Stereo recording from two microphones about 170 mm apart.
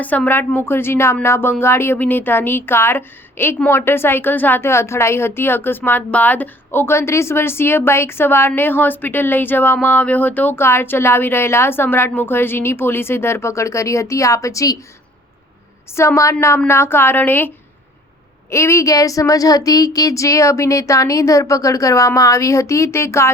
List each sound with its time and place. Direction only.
0.0 s speech: 10° left (ahead or behind)
16.0 s speech: 15° left (ahead or behind)
18.5 s speech: 15° left (ahead or behind)